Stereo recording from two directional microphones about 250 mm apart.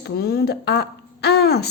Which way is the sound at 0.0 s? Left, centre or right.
Left.